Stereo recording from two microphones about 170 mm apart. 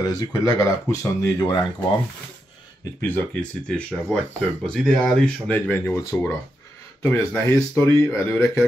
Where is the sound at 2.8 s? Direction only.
15° left (ahead or behind).